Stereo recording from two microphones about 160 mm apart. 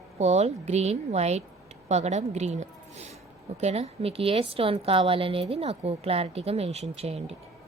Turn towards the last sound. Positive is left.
turn(degrees=-40)  # may be behind; listen again after turning